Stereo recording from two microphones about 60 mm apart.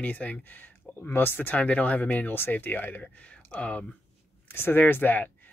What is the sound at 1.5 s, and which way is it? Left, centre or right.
Speech, left.